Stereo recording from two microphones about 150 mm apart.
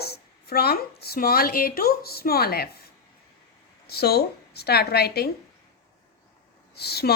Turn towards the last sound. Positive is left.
turn(degrees=90)